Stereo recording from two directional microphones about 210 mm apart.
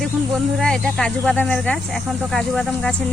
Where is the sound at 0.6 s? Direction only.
5° left (ahead or behind).